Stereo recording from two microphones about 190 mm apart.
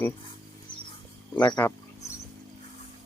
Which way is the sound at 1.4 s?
20° left (ahead or behind).